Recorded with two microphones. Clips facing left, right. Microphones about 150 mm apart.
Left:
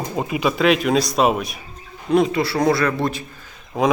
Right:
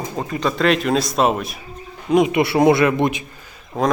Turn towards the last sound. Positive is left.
turn(degrees=0)  # may be behind; listen again after turning